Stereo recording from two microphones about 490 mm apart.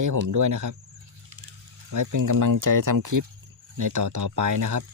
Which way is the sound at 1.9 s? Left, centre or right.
Right.